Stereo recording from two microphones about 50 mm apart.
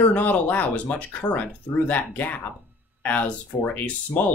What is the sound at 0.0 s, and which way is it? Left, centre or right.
Speech, left.